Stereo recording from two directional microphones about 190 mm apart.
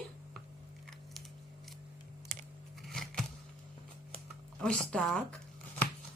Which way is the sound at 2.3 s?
40° right (ahead or behind).